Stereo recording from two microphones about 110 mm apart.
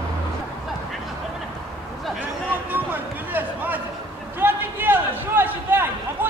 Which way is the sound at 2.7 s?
15° right (ahead or behind).